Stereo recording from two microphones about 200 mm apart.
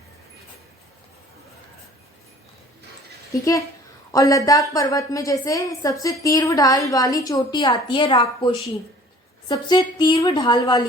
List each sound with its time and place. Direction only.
4.1 s a woman's voice: 15° left (ahead or behind)